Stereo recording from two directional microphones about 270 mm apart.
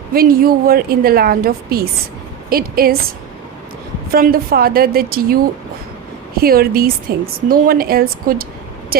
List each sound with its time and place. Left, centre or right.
0.1 s a woman's voice: right
4.1 s a woman's voice: right